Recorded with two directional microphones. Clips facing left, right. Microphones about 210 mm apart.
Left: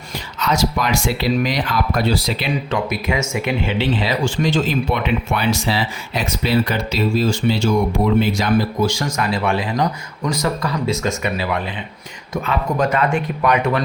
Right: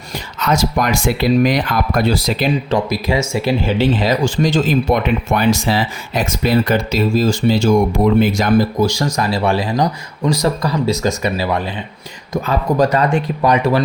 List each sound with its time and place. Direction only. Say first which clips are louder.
0.3 s speech: right 3 dB; 50° right (ahead or behind); by 13.8 s 30° right (ahead or behind)